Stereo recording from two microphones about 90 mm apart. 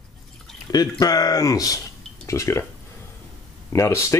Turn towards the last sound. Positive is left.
turn(degrees=30)  # may be behind; listen again after turning